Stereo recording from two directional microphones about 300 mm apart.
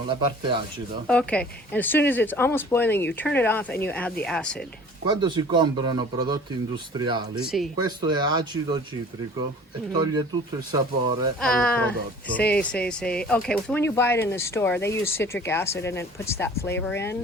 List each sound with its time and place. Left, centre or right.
0.1 s a man's voice: centre
1.0 s speech: centre
5.0 s a man's voice: centre
7.4 s speech: centre
7.8 s a man's voice: centre
9.9 s a man's voice: centre
11.3 s speech: centre